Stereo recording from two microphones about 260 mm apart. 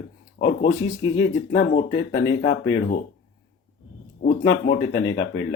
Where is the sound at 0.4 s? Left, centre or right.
Left.